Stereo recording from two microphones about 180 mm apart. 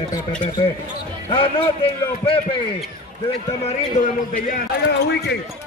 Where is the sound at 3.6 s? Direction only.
40° left (ahead or behind).